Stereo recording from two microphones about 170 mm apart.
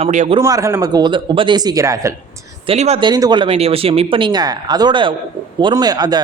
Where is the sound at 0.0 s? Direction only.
40° right (ahead or behind).